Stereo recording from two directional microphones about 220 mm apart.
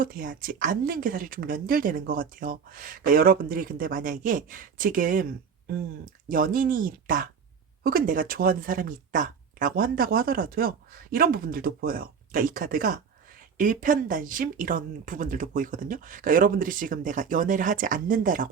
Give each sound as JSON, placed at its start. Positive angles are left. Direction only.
{"t": 0.0, "sound": "speech", "side_deg": -40}
{"t": 6.2, "sound": "speech", "side_deg": -40}